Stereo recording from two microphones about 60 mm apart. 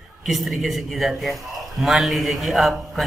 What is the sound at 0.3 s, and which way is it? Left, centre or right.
A man's voice, centre.